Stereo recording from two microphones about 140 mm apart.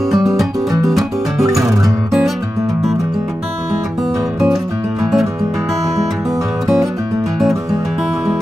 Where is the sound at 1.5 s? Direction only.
20° right (ahead or behind).